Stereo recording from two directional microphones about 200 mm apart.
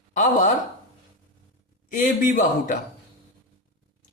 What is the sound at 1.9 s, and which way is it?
Speech, 40° left (ahead or behind).